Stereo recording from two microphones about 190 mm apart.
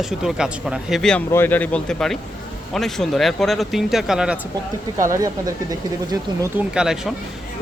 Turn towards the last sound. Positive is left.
turn(degrees=-5)  # may be behind; listen again after turning